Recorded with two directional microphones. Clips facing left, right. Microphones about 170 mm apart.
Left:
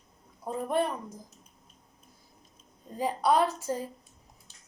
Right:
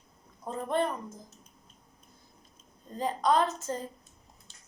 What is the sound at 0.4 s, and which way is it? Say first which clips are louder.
Speech: left 1 dB; 10° left (ahead or behind).